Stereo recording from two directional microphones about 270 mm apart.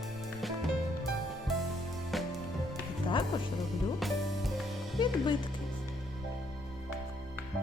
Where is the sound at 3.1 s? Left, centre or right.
Centre.